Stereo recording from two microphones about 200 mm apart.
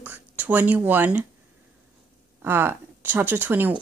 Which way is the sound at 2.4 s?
10° right (ahead or behind).